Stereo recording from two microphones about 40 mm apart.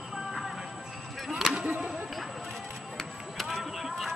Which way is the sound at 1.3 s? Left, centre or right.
Centre.